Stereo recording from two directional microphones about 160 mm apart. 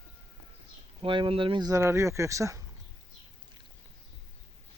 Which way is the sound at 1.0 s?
30° right (ahead or behind).